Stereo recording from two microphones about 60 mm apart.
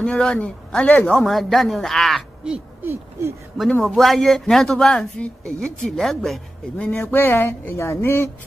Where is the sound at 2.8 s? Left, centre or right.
Right.